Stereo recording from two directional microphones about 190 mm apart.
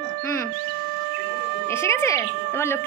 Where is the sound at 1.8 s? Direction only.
15° left (ahead or behind).